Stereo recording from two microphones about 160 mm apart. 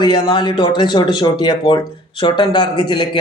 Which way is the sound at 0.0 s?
30° left (ahead or behind).